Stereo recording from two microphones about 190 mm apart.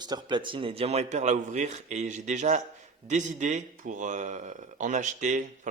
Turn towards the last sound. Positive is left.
turn(degrees=-40)  # may be behind; listen again after turning